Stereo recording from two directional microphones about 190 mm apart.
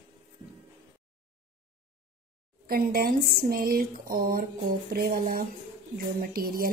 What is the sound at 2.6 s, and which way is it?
Speech, 50° right (ahead or behind).